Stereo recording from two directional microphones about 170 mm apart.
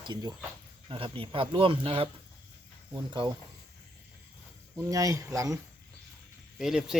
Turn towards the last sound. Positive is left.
turn(degrees=-5)  # may be behind; listen again after turning